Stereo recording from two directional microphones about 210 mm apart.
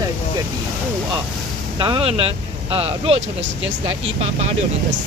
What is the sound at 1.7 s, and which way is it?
Speech, 25° right (ahead or behind).